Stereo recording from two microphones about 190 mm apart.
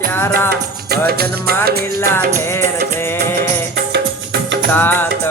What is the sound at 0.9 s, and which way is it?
Music, 55° right (ahead or behind).